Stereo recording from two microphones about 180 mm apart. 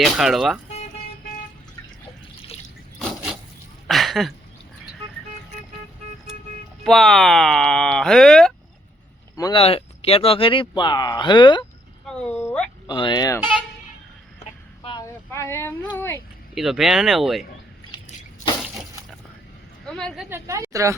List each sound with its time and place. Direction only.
0.0 s speech: centre (ahead or behind)
3.8 s a sound: centre (ahead or behind)
6.8 s speech: centre (ahead or behind)
9.3 s speech: 20° left (ahead or behind)
9.6 s speech: 30° left (ahead or behind)
12.0 s a sound: 5° left (ahead or behind)
12.9 s speech: 25° left (ahead or behind)
14.3 s a sound: 25° left (ahead or behind)
15.0 s speech: 15° left (ahead or behind)
16.6 s speech: centre (ahead or behind)
19.8 s a woman's voice: 5° left (ahead or behind)
20.3 s a woman's voice: 15° right (ahead or behind)